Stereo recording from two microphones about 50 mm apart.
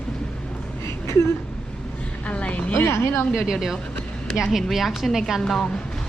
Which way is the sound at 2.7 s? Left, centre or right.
Left.